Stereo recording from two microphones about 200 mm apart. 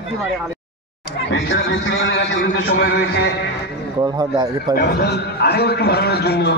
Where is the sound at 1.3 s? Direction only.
65° left (ahead or behind); by 3.3 s 50° left (ahead or behind).